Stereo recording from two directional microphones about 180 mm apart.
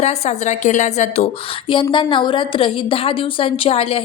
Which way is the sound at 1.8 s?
25° left (ahead or behind).